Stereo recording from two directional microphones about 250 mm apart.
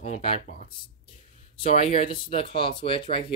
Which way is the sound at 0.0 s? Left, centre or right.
Left.